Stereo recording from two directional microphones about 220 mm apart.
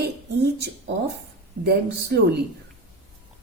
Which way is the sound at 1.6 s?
50° right (ahead or behind).